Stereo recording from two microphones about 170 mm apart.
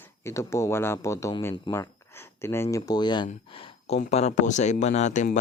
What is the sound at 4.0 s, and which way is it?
Speech, 40° left (ahead or behind).